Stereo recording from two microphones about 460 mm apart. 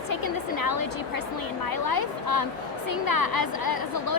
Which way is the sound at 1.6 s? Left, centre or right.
Left.